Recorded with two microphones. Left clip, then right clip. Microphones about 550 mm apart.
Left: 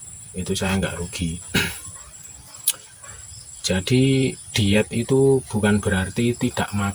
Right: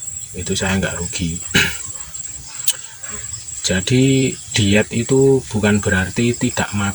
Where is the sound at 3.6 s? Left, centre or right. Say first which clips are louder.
Right 4 dB; left.